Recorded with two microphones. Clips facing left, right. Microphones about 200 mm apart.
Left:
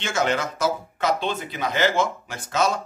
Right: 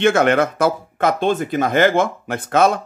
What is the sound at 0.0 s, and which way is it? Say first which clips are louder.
Speech: right 9 dB; 60° right (ahead or behind).